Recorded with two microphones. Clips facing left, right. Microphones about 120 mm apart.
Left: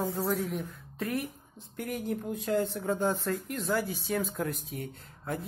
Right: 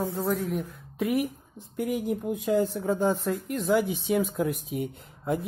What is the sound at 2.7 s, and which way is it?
Speech, centre (ahead or behind).